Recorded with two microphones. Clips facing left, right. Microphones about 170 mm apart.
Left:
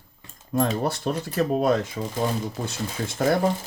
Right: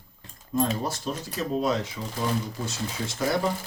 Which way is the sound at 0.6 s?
60° left (ahead or behind).